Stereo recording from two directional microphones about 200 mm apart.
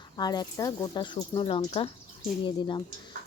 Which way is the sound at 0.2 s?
20° left (ahead or behind).